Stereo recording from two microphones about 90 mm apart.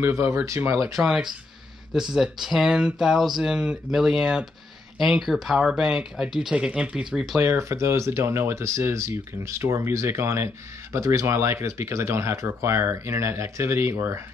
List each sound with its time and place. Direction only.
0.0 s speech: 35° right (ahead or behind)
0.9 s speech: 5° right (ahead or behind)
7.3 s speech: 35° right (ahead or behind)